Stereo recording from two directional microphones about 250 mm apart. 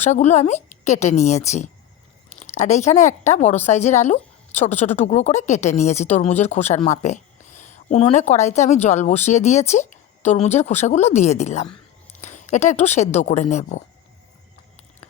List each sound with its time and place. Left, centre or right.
0.0 s a woman's voice: left
4.7 s speech: centre
4.9 s speech: left